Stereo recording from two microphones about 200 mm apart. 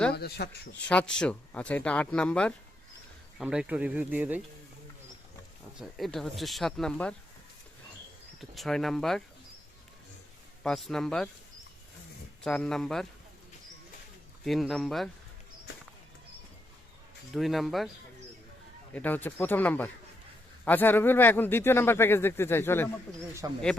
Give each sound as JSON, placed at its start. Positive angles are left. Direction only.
{"t": 0.1, "sound": "speech", "side_deg": 55}
{"t": 0.9, "sound": "speech", "side_deg": 5}
{"t": 5.8, "sound": "speech", "side_deg": 0}
{"t": 8.4, "sound": "speech", "side_deg": 0}
{"t": 10.6, "sound": "speech", "side_deg": 0}
{"t": 12.4, "sound": "speech", "side_deg": 5}
{"t": 14.4, "sound": "speech", "side_deg": 0}
{"t": 17.3, "sound": "speech", "side_deg": 0}
{"t": 18.9, "sound": "speech", "side_deg": 10}
{"t": 23.4, "sound": "speech", "side_deg": -15}